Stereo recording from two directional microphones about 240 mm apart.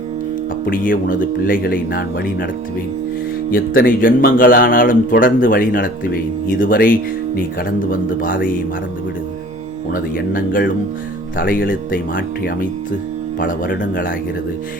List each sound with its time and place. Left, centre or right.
0.6 s speech: left
3.5 s speech: left
9.9 s speech: left